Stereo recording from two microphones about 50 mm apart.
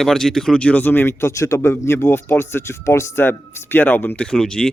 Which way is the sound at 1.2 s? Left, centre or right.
Left.